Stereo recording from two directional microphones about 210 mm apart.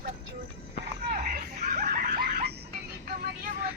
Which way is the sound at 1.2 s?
35° right (ahead or behind).